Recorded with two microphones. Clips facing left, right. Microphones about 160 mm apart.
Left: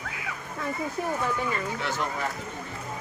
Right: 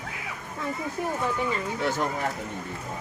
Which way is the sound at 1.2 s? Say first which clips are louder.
Right 1 dB; 25° right (ahead or behind).